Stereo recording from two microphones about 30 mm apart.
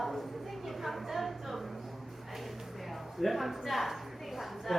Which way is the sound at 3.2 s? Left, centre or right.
Centre.